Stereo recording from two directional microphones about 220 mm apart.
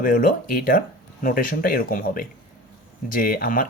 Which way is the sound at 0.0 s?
40° left (ahead or behind).